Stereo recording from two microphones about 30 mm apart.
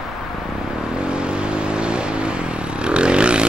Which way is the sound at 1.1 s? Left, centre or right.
Right.